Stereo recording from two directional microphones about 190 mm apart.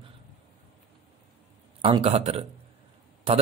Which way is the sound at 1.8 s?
30° right (ahead or behind).